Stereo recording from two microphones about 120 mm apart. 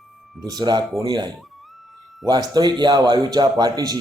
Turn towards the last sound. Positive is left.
turn(degrees=-35)  # may be behind; listen again after turning